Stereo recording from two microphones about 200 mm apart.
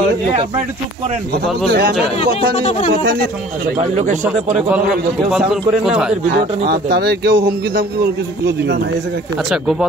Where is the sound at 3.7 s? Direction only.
35° right (ahead or behind).